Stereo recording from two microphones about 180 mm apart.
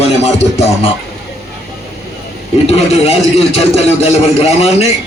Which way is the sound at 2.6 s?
35° left (ahead or behind).